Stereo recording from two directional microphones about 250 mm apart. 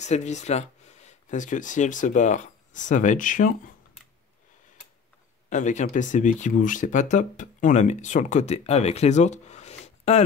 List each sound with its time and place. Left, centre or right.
0.0 s speech: left
5.5 s speech: left